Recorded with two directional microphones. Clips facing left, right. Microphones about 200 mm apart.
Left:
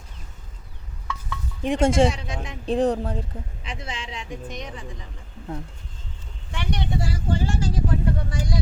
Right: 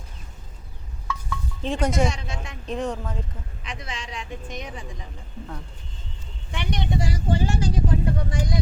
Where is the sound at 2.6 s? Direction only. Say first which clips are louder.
Left 7 dB; 35° left (ahead or behind).